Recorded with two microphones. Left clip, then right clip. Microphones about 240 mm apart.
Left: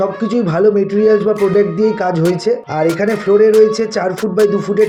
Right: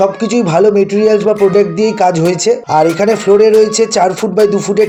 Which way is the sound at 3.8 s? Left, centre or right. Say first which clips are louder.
Right 6 dB; right.